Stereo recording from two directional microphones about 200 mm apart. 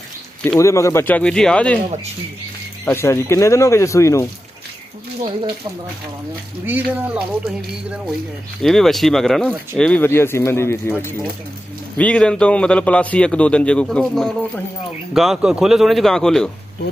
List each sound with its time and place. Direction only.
0.4 s speech: 10° left (ahead or behind)
2.8 s speech: 10° left (ahead or behind)
5.2 s speech: 25° right (ahead or behind)
6.7 s a man's voice: 10° right (ahead or behind); by 10.9 s 10° left (ahead or behind)
11.9 s a man's voice: 5° left (ahead or behind)